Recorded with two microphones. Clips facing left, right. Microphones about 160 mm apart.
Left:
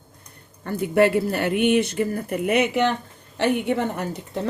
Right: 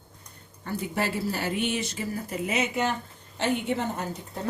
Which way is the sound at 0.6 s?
60° left (ahead or behind).